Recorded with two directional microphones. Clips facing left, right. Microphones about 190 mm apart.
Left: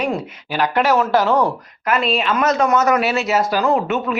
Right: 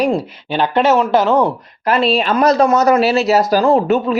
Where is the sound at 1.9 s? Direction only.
35° right (ahead or behind).